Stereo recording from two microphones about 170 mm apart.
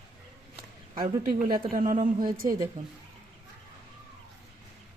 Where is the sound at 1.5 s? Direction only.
50° right (ahead or behind).